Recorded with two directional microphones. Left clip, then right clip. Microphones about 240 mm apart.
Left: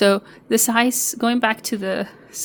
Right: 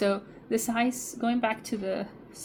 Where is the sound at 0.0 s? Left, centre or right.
Left.